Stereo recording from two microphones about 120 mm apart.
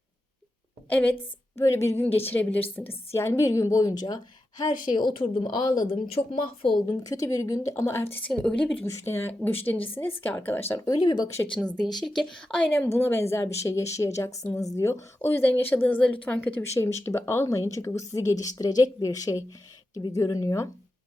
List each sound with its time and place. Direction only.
0.9 s a woman's voice: 15° left (ahead or behind)
1.5 s a woman's voice: 25° left (ahead or behind)
6.1 s speech: 55° left (ahead or behind)
7.0 s a woman's voice: 30° left (ahead or behind)
8.3 s a woman's voice: 5° left (ahead or behind)
10.9 s a woman's voice: 35° left (ahead or behind)
11.5 s a woman's voice: 5° left (ahead or behind); by 20.2 s 40° left (ahead or behind)
20.2 s a woman's voice: 25° left (ahead or behind)